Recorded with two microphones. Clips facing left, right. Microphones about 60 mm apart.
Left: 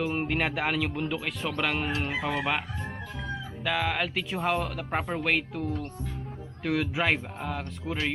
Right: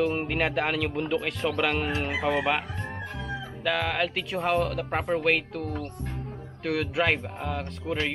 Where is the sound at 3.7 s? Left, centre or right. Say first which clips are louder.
Right 2 dB; centre.